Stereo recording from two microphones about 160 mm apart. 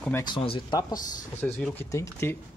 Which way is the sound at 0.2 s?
30° left (ahead or behind).